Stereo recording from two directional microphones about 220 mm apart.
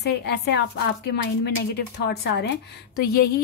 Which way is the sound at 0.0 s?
50° left (ahead or behind).